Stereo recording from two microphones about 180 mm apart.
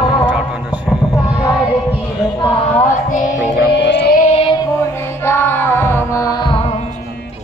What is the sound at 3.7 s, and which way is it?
Music, 75° left (ahead or behind).